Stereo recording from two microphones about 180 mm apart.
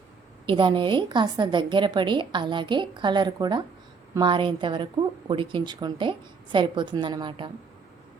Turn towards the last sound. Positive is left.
turn(degrees=-25)  # may be behind; listen again after turning